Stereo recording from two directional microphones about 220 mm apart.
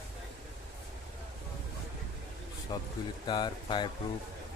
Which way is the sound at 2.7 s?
20° left (ahead or behind).